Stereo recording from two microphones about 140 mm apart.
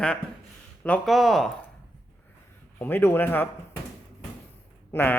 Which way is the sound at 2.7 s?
15° left (ahead or behind).